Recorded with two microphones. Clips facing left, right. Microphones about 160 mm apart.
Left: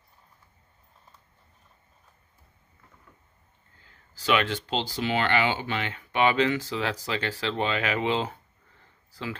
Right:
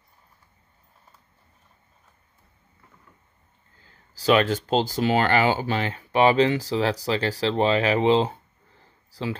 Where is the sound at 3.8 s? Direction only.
35° right (ahead or behind).